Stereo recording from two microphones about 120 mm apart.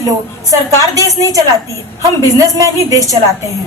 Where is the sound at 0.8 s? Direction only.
30° right (ahead or behind).